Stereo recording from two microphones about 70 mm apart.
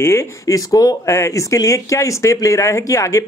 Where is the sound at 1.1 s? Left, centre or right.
Left.